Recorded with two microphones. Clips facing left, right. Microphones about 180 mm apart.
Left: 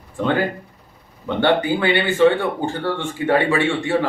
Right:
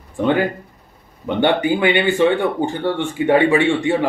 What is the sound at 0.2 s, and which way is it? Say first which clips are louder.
A man's voice: right 3 dB; 15° right (ahead or behind).